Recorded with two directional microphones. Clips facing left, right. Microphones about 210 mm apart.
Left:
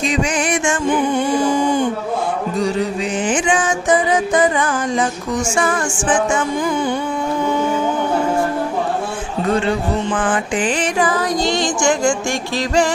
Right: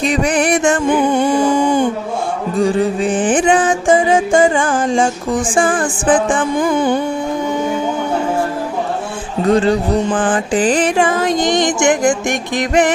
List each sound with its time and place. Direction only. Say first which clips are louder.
0.0 s music: right 4 dB; 60° right (ahead or behind)
0.5 s music: right 5 dB; 35° right (ahead or behind)
0.9 s music: right 3 dB; 55° right (ahead or behind)
3.6 s music: right 4 dB; 30° right (ahead or behind)
6.6 s music: right 4 dB; 55° right (ahead or behind)
9.5 s music: right 5 dB; 35° right (ahead or behind)
10.9 s music: right 3 dB; 25° right (ahead or behind)